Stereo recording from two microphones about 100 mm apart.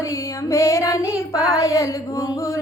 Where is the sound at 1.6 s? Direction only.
35° left (ahead or behind).